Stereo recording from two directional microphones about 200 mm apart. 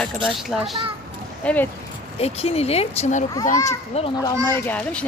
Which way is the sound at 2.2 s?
30° left (ahead or behind).